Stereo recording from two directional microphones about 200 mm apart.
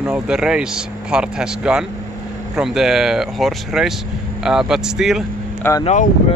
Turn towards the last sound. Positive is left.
turn(degrees=35)  # may be behind; listen again after turning